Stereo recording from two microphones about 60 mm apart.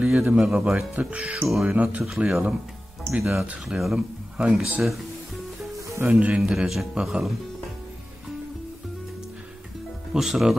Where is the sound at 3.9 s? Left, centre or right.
Centre.